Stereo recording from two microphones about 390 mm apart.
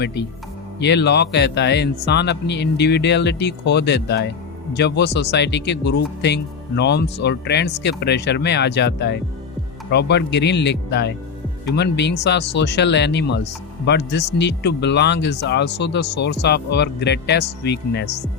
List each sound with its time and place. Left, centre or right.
0.0 s speech: left